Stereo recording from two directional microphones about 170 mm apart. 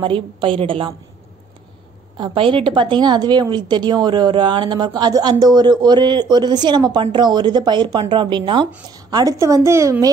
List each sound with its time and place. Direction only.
0.0 s a woman's voice: 30° right (ahead or behind)
2.1 s a woman's voice: 30° right (ahead or behind)